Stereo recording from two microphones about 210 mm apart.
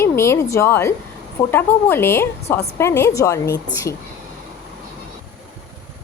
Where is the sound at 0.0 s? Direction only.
15° left (ahead or behind).